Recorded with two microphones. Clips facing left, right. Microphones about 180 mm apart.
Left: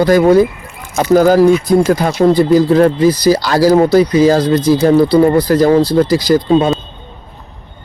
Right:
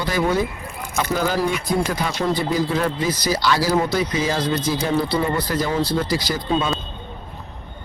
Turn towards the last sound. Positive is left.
turn(degrees=40)  # may be behind; listen again after turning